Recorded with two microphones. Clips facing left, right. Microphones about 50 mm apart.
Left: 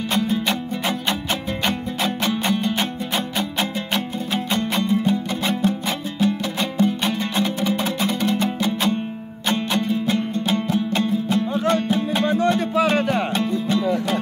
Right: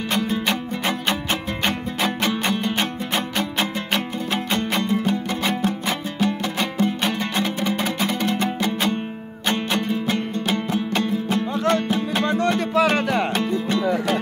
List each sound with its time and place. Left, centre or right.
0.1 s music: right
3.9 s music: right